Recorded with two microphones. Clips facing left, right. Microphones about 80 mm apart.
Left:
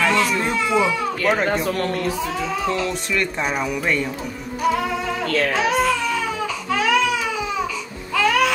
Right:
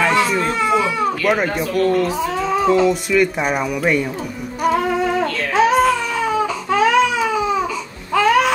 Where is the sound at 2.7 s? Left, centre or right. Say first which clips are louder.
Right 8 dB; centre.